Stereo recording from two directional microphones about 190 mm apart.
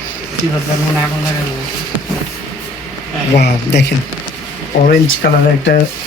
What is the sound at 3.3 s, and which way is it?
Speech, 65° left (ahead or behind).